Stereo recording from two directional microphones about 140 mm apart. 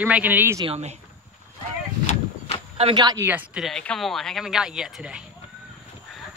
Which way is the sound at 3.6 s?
5° left (ahead or behind).